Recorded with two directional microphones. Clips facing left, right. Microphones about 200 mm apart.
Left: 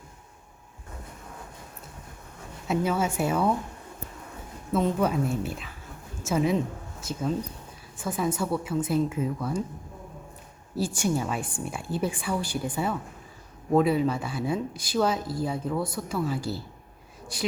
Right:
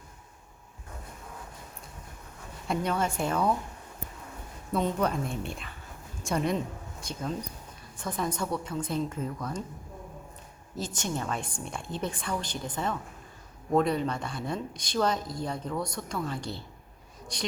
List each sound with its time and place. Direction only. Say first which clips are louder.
2.6 s speech: left 3 dB; 5° left (ahead or behind)
4.7 s speech: left 3 dB; 5° left (ahead or behind)
10.8 s speech: left 6 dB; 10° left (ahead or behind)